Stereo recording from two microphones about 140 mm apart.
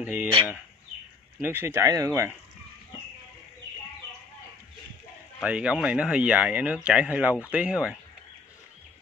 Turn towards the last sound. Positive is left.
turn(degrees=-5)  # may be behind; listen again after turning